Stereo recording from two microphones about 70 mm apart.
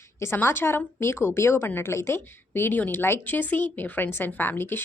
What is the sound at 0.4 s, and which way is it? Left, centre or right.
A woman's voice, left.